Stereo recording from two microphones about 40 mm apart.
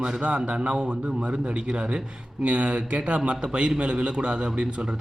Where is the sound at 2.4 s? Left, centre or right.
Right.